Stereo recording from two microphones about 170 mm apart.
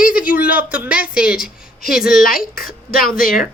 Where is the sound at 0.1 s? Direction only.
10° right (ahead or behind).